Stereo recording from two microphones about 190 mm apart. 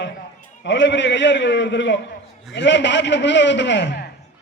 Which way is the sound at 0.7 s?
70° left (ahead or behind).